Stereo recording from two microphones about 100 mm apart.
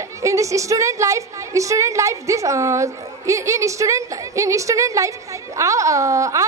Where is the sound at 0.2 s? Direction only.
30° right (ahead or behind).